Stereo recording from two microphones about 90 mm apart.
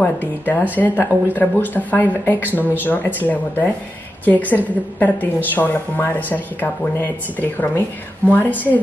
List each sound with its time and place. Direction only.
0.0 s speech: 20° left (ahead or behind)